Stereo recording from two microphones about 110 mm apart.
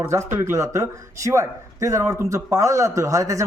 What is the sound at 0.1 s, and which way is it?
Speech, 25° right (ahead or behind).